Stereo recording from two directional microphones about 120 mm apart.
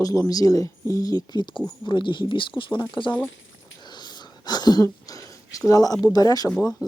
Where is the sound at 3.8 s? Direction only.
35° left (ahead or behind).